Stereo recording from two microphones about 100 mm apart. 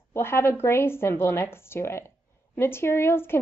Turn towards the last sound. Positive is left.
turn(degrees=25)  # may be behind; listen again after turning